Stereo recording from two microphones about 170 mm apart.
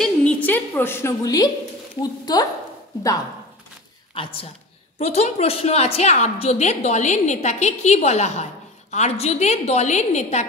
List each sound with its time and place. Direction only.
0.0 s a sound: 10° left (ahead or behind)
2.0 s a woman's voice: 25° left (ahead or behind)
4.1 s a woman's voice: 35° left (ahead or behind)